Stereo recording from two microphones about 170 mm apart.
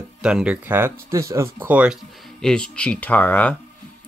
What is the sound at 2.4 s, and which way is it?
Speech, 5° left (ahead or behind).